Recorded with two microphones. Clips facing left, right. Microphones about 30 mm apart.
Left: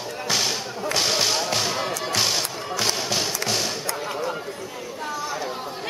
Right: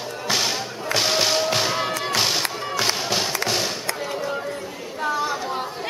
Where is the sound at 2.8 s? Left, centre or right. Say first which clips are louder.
Right 2 dB; centre.